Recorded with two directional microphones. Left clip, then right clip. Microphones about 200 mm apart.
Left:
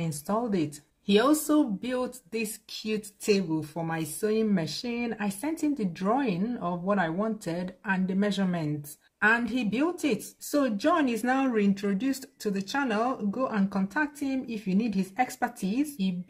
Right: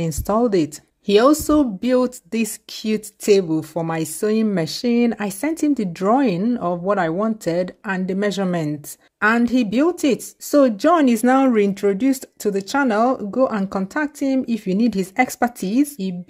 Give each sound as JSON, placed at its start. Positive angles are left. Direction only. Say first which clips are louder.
{"t": 0.0, "sound": "speech", "louder": "right 11 dB", "side_deg": -45}